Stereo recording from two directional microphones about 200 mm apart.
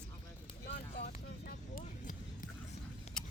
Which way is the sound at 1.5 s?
45° left (ahead or behind).